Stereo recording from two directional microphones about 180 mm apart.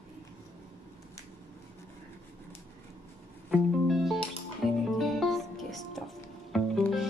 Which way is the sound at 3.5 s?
Centre (ahead or behind).